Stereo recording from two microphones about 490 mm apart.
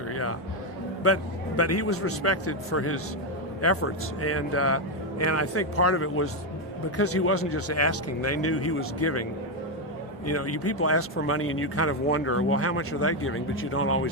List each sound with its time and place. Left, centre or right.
0.1 s music: left
1.0 s speech: left
10.2 s speech: left